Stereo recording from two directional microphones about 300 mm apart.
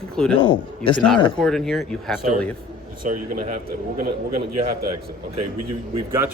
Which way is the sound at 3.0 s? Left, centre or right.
Right.